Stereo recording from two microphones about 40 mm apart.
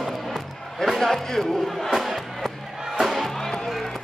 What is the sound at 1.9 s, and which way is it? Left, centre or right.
Music, centre.